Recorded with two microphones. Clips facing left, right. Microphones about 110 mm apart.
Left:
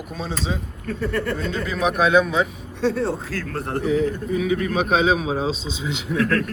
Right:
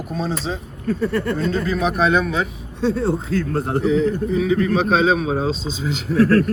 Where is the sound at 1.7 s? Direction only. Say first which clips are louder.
Left 2 dB; centre (ahead or behind).